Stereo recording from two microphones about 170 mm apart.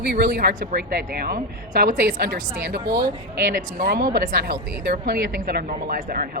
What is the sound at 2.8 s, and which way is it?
Speech, 20° right (ahead or behind).